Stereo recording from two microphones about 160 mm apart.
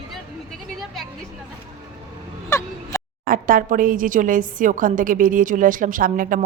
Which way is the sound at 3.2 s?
60° right (ahead or behind).